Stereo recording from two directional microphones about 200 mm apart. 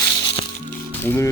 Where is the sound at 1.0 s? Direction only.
10° left (ahead or behind).